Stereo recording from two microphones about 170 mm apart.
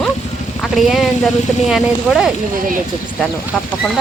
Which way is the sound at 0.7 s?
Centre (ahead or behind).